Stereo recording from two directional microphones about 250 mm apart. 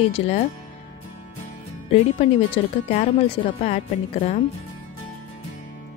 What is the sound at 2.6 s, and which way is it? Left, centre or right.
Speech, left.